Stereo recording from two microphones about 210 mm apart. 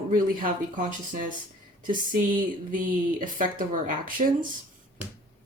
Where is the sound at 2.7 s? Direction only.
40° right (ahead or behind).